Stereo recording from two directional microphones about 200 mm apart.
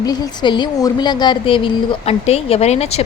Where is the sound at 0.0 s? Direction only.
20° left (ahead or behind).